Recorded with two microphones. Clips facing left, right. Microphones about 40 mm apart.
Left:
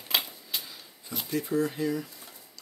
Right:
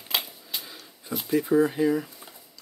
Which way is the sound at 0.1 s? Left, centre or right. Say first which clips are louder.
Even; centre.